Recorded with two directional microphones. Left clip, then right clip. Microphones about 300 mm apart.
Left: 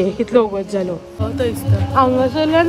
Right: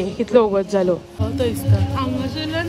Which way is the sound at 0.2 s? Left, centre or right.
Centre.